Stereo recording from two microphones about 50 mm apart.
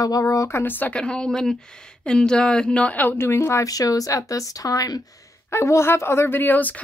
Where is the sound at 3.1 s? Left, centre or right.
Left.